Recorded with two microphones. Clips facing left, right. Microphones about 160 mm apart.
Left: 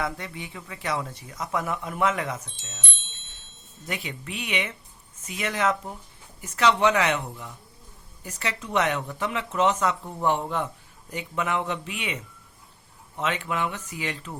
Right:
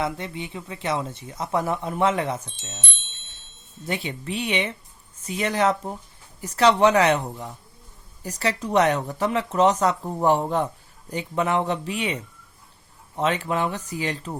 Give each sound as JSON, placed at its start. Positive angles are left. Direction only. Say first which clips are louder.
{"t": 0.0, "sound": "speech", "louder": "right 3 dB", "side_deg": -25}
{"t": 3.8, "sound": "speech", "louder": "right 5 dB", "side_deg": -30}